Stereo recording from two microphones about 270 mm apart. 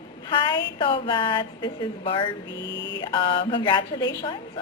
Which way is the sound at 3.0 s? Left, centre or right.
Centre.